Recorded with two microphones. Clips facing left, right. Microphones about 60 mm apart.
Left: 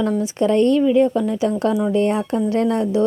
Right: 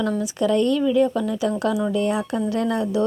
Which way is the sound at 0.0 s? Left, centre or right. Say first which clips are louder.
Left 3 dB; left.